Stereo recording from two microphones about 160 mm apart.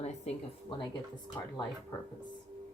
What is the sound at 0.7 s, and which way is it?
Speech, 30° left (ahead or behind).